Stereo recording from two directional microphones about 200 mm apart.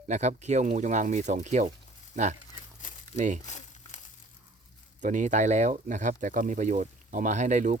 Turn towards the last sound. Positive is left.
turn(degrees=-40)  # may be behind; listen again after turning